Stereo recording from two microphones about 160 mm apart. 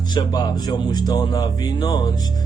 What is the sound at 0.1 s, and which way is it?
Speech, 25° left (ahead or behind).